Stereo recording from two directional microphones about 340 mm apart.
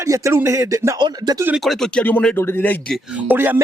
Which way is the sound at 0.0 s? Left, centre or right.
Centre.